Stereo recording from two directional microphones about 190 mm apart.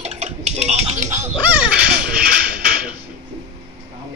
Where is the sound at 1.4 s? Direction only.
5° right (ahead or behind).